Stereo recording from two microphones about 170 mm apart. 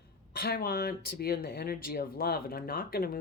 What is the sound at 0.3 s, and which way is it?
Speech, 65° left (ahead or behind).